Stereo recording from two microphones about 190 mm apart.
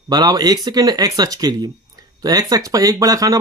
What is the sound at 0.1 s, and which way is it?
Speech, 20° right (ahead or behind).